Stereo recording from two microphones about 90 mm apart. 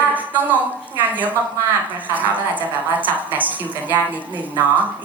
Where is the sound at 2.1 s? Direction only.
20° right (ahead or behind).